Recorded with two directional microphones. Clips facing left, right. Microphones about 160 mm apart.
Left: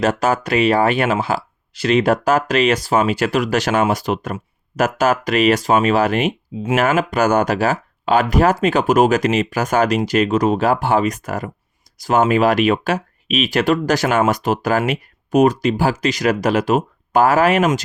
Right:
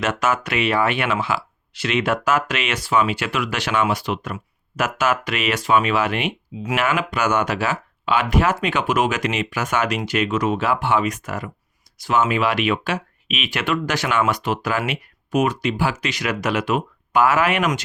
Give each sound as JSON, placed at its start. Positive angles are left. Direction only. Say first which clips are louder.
{"t": 0.0, "sound": "speech", "louder": "left 4 dB", "side_deg": 35}